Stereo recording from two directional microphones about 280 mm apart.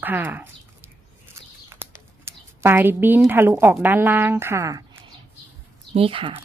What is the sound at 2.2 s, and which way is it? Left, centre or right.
A woman's voice, centre.